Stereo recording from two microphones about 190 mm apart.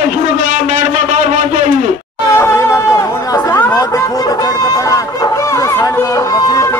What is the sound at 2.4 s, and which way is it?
Chatter, 15° left (ahead or behind).